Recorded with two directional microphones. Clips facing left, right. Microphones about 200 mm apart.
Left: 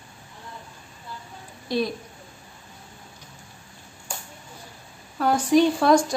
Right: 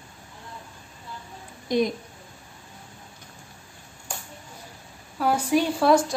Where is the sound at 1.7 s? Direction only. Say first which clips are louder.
Right 2 dB; 20° right (ahead or behind).